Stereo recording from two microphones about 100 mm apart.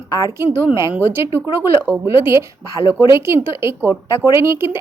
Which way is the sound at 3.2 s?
25° right (ahead or behind).